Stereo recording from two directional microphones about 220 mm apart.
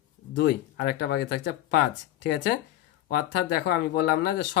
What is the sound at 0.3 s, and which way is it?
Speech, 50° left (ahead or behind).